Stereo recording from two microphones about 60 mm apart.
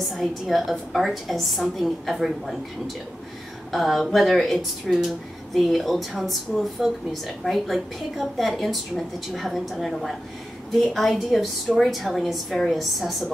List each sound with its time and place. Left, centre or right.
0.1 s a woman's voice: centre
3.7 s a woman's voice: centre